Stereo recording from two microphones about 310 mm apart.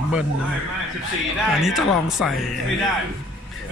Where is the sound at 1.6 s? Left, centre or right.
Centre.